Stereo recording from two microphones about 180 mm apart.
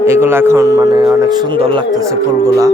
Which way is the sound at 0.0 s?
15° right (ahead or behind).